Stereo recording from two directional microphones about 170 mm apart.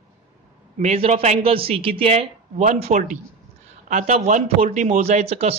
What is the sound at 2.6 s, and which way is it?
Speech, 45° right (ahead or behind).